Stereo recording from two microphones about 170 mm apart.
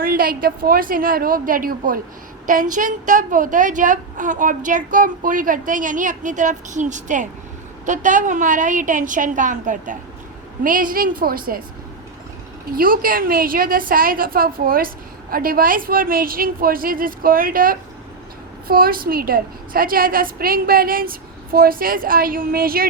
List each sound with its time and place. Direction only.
0.0 s a woman's voice: 60° right (ahead or behind)
12.7 s a woman's voice: 60° right (ahead or behind)